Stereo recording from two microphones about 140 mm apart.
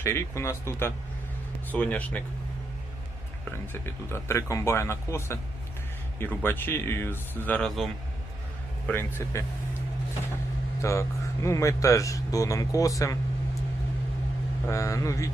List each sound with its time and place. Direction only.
0.0 s speech: 20° left (ahead or behind)
3.5 s speech: 15° left (ahead or behind)
8.9 s speech: 15° left (ahead or behind)
10.8 s speech: 20° left (ahead or behind)
14.7 s speech: 20° left (ahead or behind)